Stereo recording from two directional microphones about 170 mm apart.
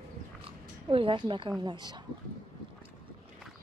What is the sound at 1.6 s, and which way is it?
Speech, 25° right (ahead or behind).